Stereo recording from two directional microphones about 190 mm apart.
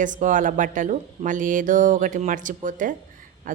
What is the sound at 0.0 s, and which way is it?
Speech, 45° right (ahead or behind).